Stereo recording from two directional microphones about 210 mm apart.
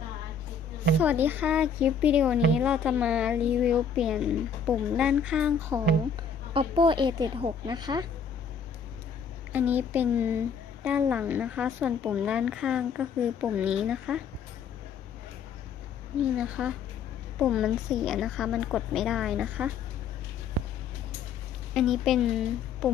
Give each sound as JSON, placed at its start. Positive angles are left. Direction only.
{"t": 1.0, "sound": "a woman's voice", "side_deg": -10}
{"t": 6.5, "sound": "a woman's voice", "side_deg": -25}
{"t": 9.5, "sound": "a woman's voice", "side_deg": -10}
{"t": 16.4, "sound": "a woman's voice", "side_deg": -5}
{"t": 21.7, "sound": "a woman's voice", "side_deg": 0}